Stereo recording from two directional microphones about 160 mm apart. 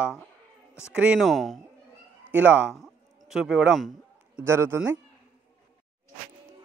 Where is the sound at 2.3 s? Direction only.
10° right (ahead or behind).